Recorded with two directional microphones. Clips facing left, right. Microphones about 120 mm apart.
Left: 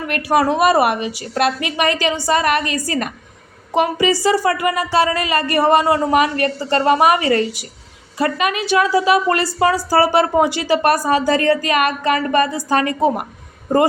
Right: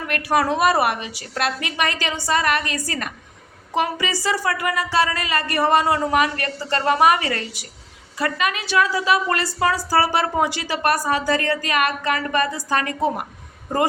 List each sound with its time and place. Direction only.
0.1 s a woman's voice: 15° left (ahead or behind)